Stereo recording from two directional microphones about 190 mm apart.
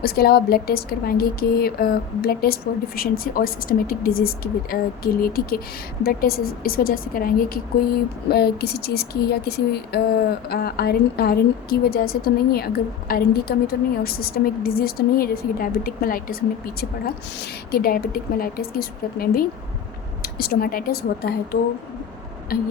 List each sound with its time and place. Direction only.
0.0 s speech: 55° left (ahead or behind)